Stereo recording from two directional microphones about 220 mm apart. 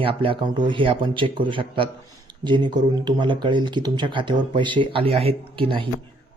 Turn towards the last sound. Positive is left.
turn(degrees=-25)  # may be behind; listen again after turning